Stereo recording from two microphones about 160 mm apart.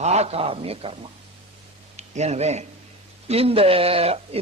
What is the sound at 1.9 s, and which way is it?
Speech, 45° right (ahead or behind).